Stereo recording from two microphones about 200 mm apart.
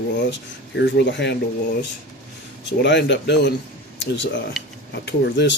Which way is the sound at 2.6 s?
60° left (ahead or behind).